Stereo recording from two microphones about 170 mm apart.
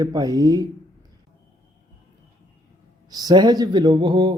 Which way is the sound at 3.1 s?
20° right (ahead or behind).